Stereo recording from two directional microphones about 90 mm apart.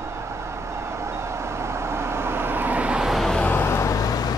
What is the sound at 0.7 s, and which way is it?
Vehicle, 30° right (ahead or behind).